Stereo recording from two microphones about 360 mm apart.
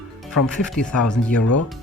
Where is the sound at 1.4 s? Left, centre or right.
Left.